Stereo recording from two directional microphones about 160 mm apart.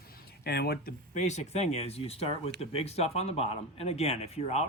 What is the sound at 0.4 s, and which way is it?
Speech, 85° left.